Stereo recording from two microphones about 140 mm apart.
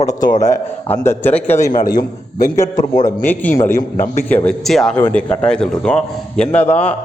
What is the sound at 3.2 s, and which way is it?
Speech, 15° left (ahead or behind).